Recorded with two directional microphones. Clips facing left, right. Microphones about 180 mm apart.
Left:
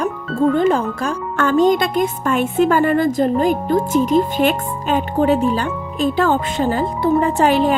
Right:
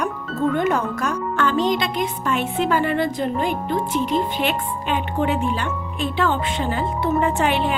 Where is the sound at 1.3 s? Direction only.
45° left (ahead or behind).